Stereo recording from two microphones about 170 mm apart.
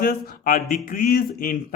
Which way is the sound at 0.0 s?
55° left (ahead or behind).